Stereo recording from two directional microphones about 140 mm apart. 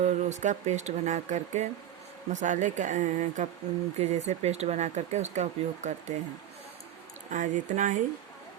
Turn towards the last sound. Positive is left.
turn(degrees=-65)  # may be behind; listen again after turning